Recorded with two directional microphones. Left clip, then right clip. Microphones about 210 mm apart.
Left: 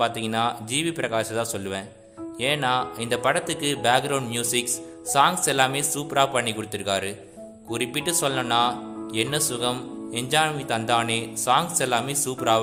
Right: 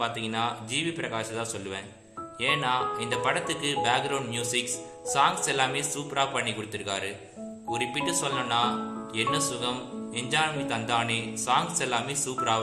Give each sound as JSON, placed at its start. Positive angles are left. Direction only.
{"t": 0.0, "sound": "speech", "side_deg": 55}